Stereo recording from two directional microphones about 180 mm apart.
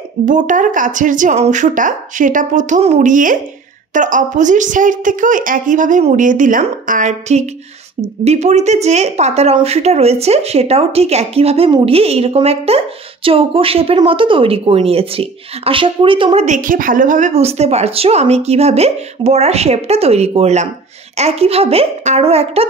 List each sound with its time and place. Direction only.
0.2 s a woman's voice: 45° right (ahead or behind); by 16.4 s 30° right (ahead or behind)
16.4 s speech: 45° right (ahead or behind)